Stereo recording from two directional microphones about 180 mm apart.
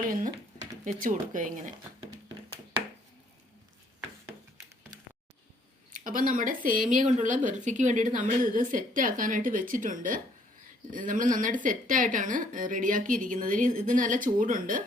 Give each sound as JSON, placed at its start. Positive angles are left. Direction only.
{"t": 0.9, "sound": "a woman's voice", "side_deg": -45}
{"t": 5.9, "sound": "a woman's voice", "side_deg": -50}